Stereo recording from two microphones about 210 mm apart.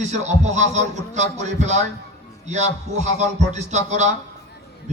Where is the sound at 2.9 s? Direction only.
35° right (ahead or behind).